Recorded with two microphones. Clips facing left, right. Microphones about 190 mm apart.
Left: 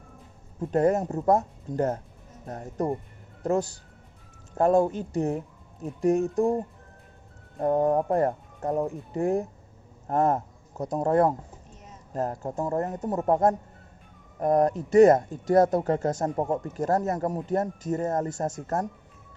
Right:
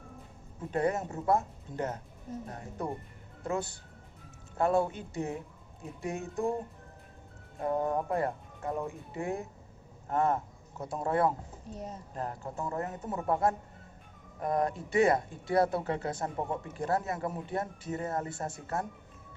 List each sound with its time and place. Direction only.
0.7 s speech: 40° left (ahead or behind)
7.6 s speech: 35° left (ahead or behind)
11.7 s speech: 35° right (ahead or behind)
12.1 s speech: 40° left (ahead or behind)